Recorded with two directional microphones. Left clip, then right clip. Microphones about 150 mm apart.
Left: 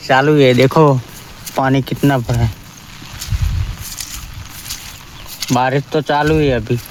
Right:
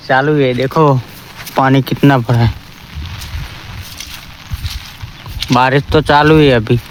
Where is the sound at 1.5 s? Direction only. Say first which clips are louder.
Right 4 dB; 15° right (ahead or behind).